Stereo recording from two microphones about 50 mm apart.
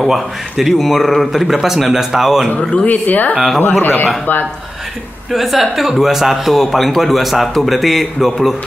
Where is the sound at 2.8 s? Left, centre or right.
Left.